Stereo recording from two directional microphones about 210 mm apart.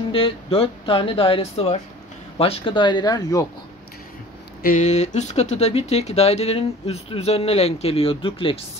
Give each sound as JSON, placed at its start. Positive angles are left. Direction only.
{"t": 0.1, "sound": "speech", "side_deg": 25}
{"t": 4.6, "sound": "speech", "side_deg": 35}